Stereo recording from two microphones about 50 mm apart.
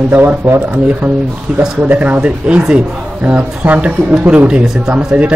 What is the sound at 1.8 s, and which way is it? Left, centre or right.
Speech, right.